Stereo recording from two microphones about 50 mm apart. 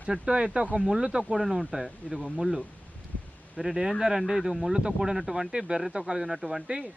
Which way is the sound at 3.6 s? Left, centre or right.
Centre.